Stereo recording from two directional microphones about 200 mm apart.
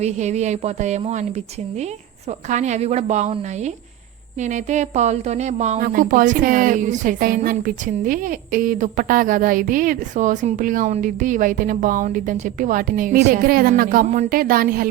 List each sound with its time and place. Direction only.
0.0 s speech: 35° right (ahead or behind)
2.5 s a woman's voice: 35° right (ahead or behind)